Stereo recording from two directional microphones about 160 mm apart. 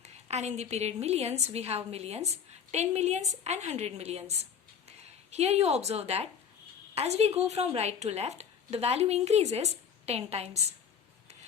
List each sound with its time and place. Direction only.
0.0 s a woman's voice: 45° right (ahead or behind)